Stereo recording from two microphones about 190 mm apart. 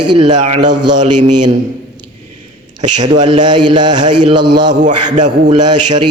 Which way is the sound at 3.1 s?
25° right (ahead or behind).